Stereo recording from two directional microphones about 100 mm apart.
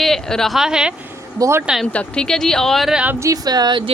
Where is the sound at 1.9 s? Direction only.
10° left (ahead or behind).